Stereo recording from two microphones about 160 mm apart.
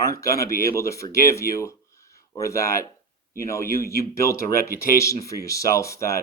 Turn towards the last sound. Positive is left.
turn(degrees=20)  # may be behind; listen again after turning